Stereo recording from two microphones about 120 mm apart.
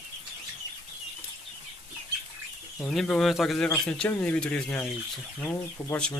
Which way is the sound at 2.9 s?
Centre (ahead or behind).